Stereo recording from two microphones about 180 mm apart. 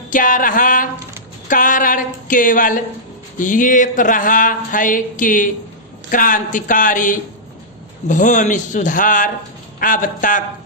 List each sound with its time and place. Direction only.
0.1 s speech: 50° left (ahead or behind)